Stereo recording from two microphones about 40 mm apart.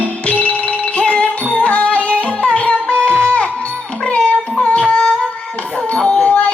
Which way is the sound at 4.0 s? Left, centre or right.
Left.